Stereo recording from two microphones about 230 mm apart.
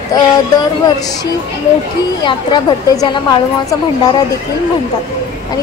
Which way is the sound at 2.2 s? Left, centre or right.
Centre.